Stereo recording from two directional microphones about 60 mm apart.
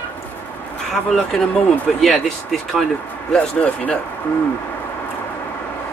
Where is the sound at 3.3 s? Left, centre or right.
Left.